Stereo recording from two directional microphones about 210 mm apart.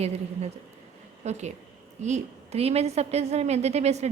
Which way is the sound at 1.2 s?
30° right (ahead or behind).